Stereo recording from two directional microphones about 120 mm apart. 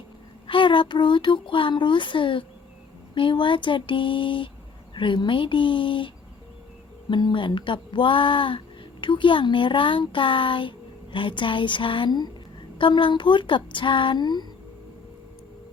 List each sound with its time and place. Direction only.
0.4 s speech: 45° left (ahead or behind)
7.1 s speech: 40° left (ahead or behind)